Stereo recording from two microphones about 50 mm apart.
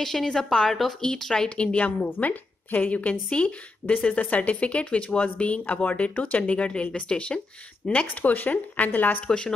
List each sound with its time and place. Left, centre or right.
0.0 s a woman's voice: centre; by 9.2 s left